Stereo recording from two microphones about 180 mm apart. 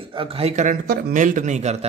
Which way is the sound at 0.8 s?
50° right (ahead or behind).